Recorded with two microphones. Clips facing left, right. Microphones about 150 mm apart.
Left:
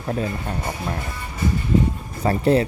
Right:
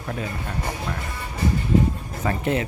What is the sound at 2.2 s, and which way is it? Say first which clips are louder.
Speech: left 6 dB; 35° left (ahead or behind).